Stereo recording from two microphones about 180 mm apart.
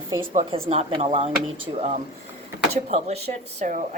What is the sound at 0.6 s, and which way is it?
Speech, 35° right (ahead or behind).